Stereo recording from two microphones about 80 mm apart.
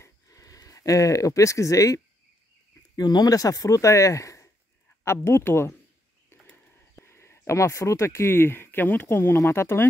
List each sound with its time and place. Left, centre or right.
0.0 s a sound: left
3.0 s speech: left
7.0 s speech: left